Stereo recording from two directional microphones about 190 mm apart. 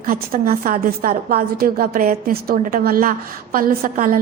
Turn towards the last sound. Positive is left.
turn(degrees=-50)  # may be behind; listen again after turning